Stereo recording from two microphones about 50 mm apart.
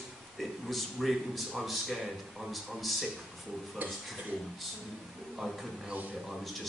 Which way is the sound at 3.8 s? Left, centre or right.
Right.